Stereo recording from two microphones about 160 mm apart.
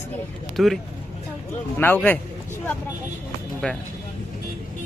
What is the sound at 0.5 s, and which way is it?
Speech, centre (ahead or behind).